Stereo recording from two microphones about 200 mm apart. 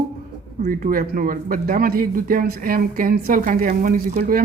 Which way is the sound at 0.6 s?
45° right (ahead or behind).